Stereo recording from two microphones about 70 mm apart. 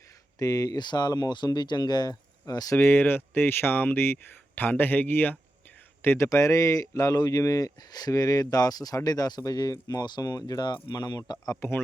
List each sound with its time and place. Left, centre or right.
0.3 s speech: left
2.7 s speech: left
6.2 s speech: left
11.6 s speech: left